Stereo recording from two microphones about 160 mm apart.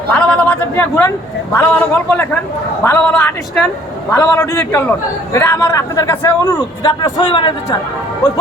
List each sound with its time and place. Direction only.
0.1 s a man's voice: 5° left (ahead or behind)
7.3 s a man's voice: 30° left (ahead or behind)